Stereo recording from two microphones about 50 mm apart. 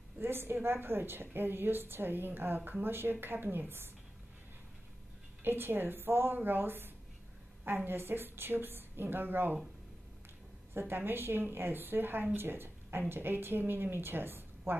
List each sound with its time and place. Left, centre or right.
0.2 s a woman's voice: right
5.4 s a woman's voice: right
10.7 s a woman's voice: right